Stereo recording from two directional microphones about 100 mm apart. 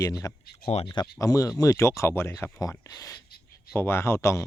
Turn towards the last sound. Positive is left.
turn(degrees=30)  # may be behind; listen again after turning